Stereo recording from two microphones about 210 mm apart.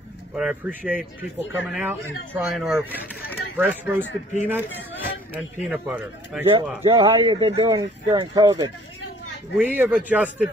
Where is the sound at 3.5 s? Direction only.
10° right (ahead or behind).